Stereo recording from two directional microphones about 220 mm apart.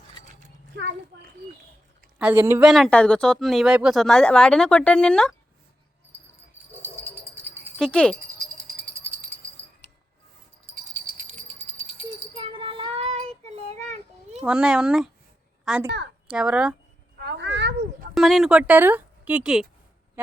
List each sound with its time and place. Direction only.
2.1 s speech: 10° right (ahead or behind)
7.8 s speech: 5° left (ahead or behind)
8.6 s rattle: 10° right (ahead or behind)
10.9 s music: 30° right (ahead or behind)
11.9 s child singing: 25° right (ahead or behind)
14.4 s a woman's voice: 5° right (ahead or behind)
17.2 s a sound: 50° right (ahead or behind)
18.1 s speech: centre (ahead or behind)